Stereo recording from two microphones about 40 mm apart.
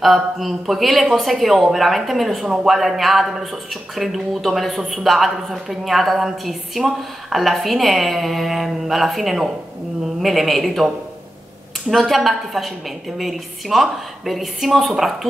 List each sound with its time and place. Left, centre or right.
0.0 s speech: centre
11.9 s speech: centre